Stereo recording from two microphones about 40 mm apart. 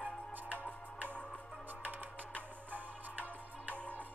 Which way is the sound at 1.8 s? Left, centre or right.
Right.